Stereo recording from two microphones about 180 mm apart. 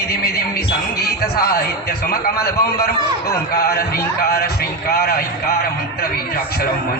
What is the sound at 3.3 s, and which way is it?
A man's voice, 60° left (ahead or behind).